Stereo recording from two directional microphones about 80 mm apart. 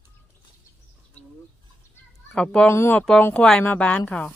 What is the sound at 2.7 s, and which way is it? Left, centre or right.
A woman's voice, left.